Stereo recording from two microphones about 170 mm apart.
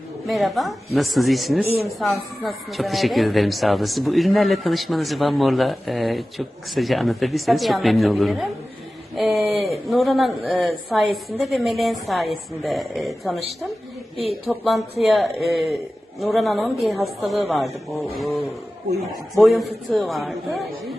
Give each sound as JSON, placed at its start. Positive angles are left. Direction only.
{"t": 0.3, "sound": "speech", "side_deg": 0}
{"t": 19.3, "sound": "speech", "side_deg": 0}